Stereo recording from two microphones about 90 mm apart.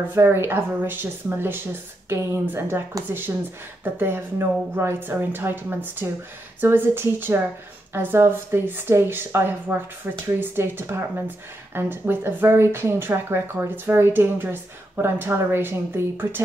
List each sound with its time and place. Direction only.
0.1 s a woman's voice: 25° right (ahead or behind)
2.0 s a woman's voice: 30° right (ahead or behind)